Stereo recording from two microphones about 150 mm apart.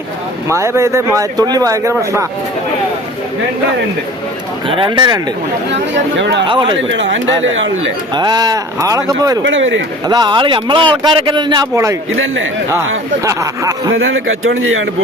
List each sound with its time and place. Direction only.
0.4 s speech: 20° right (ahead or behind)
4.7 s speech: 35° right (ahead or behind)
6.5 s speech: 35° right (ahead or behind)
8.1 s speech: 30° right (ahead or behind)
13.2 s speech: 20° right (ahead or behind)